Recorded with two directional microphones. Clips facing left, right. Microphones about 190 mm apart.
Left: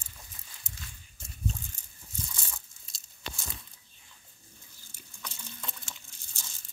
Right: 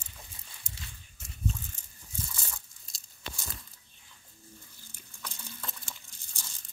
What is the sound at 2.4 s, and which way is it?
Crumpling, centre (ahead or behind).